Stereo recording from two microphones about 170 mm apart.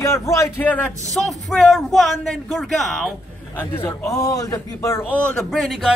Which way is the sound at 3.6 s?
15° left (ahead or behind).